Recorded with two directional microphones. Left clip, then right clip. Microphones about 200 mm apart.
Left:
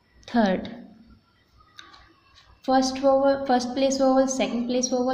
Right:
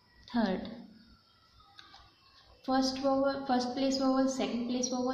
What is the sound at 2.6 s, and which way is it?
A woman's voice, 35° left (ahead or behind).